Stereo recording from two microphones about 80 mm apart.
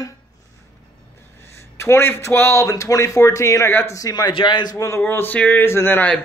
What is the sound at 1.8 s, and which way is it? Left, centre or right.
A man's voice, left.